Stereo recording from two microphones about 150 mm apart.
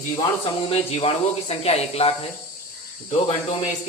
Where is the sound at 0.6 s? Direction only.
40° left (ahead or behind).